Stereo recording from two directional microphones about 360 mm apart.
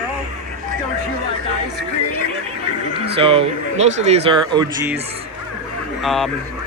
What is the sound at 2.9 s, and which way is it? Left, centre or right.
Speech, centre.